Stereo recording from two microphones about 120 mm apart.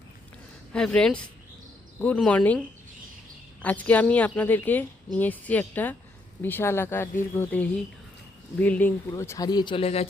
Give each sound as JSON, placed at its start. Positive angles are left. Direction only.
{"t": 0.7, "sound": "a woman's voice", "side_deg": 5}
{"t": 9.1, "sound": "speech", "side_deg": 25}
{"t": 9.5, "sound": "a man's voice", "side_deg": 40}
{"t": 9.8, "sound": "speech", "side_deg": 60}